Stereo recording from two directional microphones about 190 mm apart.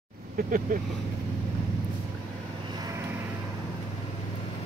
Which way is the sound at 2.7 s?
20° right (ahead or behind).